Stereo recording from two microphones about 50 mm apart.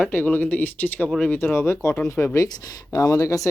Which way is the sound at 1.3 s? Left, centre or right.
Left.